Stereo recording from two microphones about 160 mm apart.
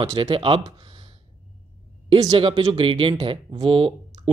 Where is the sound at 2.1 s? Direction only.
35° right (ahead or behind).